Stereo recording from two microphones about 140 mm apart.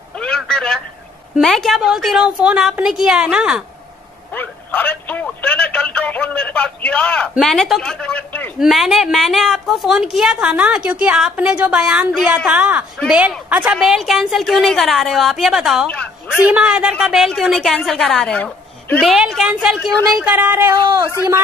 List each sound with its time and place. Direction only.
0.2 s telephone: 5° left (ahead or behind)
1.4 s a woman's voice: centre (ahead or behind)
4.3 s speech: 10° left (ahead or behind)
8.5 s a woman's voice: centre (ahead or behind)
15.9 s a sound: 10° left (ahead or behind)
16.3 s a man's voice: 10° right (ahead or behind); by 18.9 s 10° left (ahead or behind)
18.9 s a woman's voice: centre (ahead or behind); by 21.0 s 20° right (ahead or behind)